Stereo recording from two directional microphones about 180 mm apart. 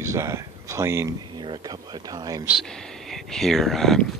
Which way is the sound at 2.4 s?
Centre (ahead or behind).